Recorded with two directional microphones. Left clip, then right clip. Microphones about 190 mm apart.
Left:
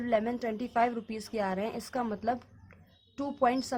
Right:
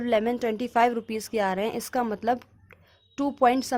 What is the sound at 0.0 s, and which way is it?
A woman's voice, 50° right (ahead or behind).